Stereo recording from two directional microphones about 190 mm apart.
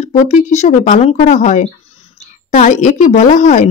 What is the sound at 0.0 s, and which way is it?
A woman's voice, 35° left (ahead or behind).